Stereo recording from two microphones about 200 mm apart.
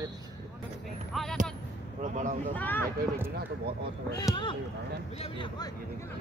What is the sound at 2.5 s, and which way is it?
Speech, 10° left (ahead or behind).